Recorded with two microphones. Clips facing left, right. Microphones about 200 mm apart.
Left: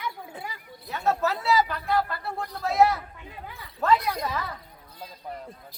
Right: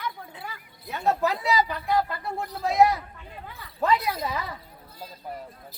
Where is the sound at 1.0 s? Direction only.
15° right (ahead or behind).